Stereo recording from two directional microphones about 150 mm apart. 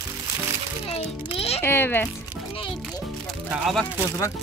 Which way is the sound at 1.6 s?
15° left (ahead or behind).